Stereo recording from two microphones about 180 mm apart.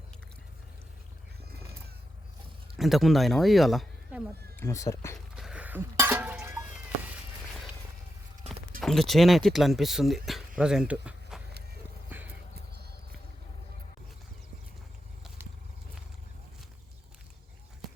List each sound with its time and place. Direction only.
2.7 s speech: centre (ahead or behind)
4.6 s speech: 15° left (ahead or behind)
5.3 s a sound: 5° right (ahead or behind)
8.8 s speech: centre (ahead or behind)
12.1 s clip-clop: 10° right (ahead or behind)